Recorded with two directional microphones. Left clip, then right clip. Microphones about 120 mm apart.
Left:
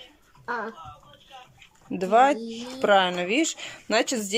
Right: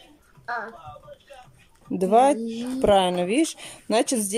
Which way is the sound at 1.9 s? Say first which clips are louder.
Right 1 dB; 30° right (ahead or behind).